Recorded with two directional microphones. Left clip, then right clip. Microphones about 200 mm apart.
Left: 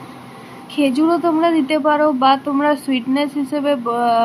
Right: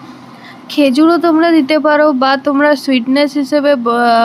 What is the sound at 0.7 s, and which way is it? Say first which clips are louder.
Speech: right 6 dB; 30° right (ahead or behind).